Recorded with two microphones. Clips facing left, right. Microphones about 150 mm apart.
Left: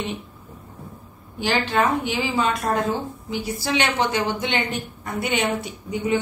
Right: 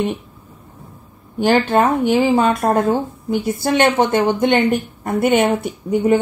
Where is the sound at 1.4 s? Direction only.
50° right (ahead or behind).